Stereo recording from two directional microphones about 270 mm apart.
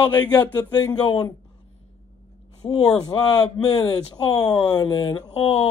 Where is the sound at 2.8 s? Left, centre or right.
Centre.